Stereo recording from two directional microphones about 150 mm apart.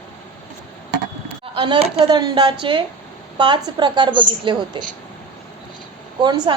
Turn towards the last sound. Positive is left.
turn(degrees=-30)  # may be behind; listen again after turning